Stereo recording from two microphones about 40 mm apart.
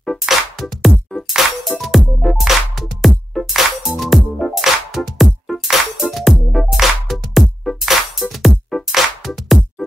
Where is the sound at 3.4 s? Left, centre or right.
Centre.